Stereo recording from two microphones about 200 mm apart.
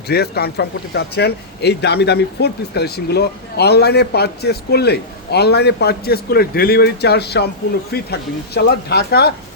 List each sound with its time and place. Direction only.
0.1 s a man's voice: 55° left (ahead or behind)